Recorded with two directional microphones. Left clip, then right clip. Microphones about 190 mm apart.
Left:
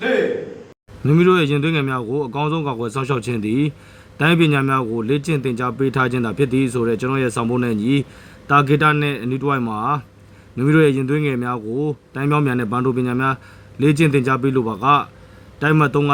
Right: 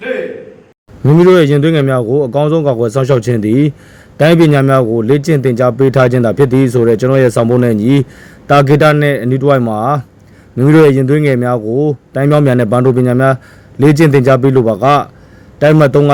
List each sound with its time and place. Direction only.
1.0 s a man's voice: 10° right (ahead or behind)